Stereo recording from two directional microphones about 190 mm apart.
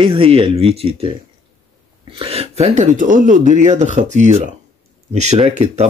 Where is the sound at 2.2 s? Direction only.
30° right (ahead or behind).